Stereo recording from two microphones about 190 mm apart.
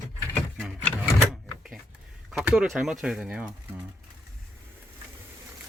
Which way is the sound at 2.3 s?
Centre (ahead or behind).